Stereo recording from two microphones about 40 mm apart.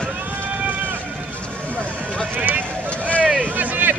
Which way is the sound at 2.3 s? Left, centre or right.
Right.